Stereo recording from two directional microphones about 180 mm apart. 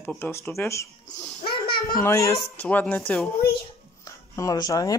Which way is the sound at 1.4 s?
30° left (ahead or behind).